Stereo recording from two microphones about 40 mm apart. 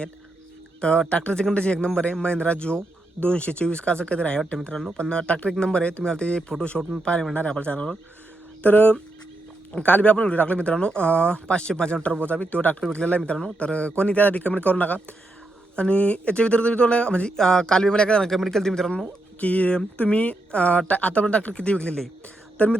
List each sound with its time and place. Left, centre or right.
0.8 s speech: left
4.5 s speech: centre
8.6 s speech: left; by 12.0 s centre
12.3 s speech: left
15.7 s speech: left
17.3 s speech: centre
18.3 s speech: centre
18.6 s speech: centre
19.4 s speech: left
22.6 s speech: left